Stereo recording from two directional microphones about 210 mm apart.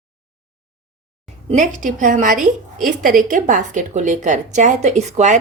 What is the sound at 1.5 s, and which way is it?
A woman's voice, 40° right (ahead or behind).